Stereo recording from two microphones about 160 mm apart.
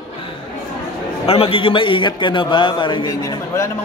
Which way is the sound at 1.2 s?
35° left (ahead or behind).